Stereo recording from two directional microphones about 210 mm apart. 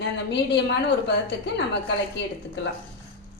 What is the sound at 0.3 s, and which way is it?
A woman's voice, 55° left (ahead or behind).